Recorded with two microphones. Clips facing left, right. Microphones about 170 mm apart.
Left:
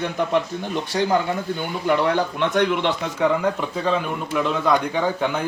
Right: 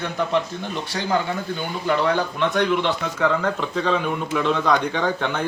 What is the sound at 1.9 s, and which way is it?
Speech, 20° left (ahead or behind).